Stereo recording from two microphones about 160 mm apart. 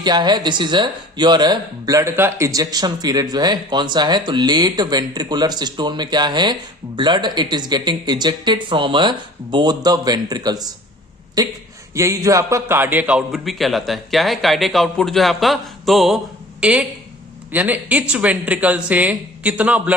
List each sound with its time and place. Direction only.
0.0 s a man's voice: 25° right (ahead or behind); by 20.0 s 10° right (ahead or behind)